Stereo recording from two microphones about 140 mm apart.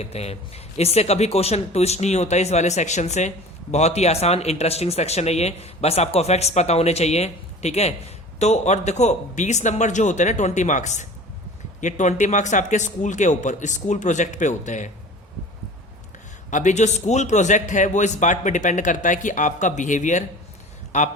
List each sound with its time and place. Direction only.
0.0 s a man's voice: 50° left (ahead or behind)
16.5 s a man's voice: 60° left (ahead or behind)